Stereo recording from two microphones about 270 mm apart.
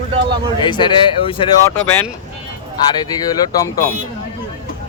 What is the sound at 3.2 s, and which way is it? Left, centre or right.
Speech, centre.